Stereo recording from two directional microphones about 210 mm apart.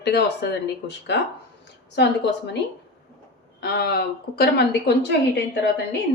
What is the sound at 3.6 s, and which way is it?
A woman's voice, 50° left (ahead or behind).